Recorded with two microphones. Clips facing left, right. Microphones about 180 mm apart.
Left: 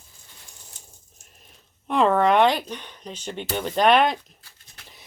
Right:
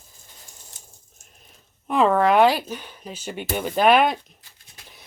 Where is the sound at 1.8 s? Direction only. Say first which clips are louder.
Right 1 dB; centre (ahead or behind).